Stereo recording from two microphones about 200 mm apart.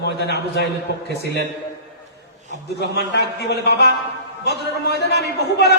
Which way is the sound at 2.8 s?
55° left (ahead or behind).